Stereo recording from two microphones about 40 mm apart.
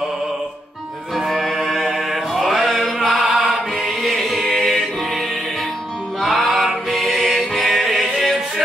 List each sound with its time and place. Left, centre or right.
1.1 s music: centre
6.2 s music: centre